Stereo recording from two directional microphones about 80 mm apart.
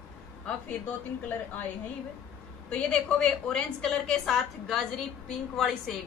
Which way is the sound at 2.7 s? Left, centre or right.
Centre.